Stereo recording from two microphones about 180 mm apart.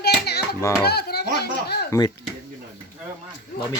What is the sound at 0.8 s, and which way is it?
A child's voice, 65° left (ahead or behind).